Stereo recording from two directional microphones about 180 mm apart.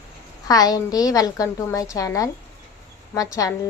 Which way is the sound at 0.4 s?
20° left (ahead or behind).